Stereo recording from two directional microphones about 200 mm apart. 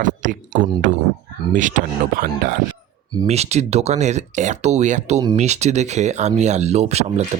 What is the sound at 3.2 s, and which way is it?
Speech, 35° right (ahead or behind).